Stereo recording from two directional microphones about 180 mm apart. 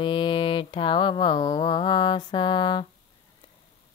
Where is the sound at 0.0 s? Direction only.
25° left (ahead or behind).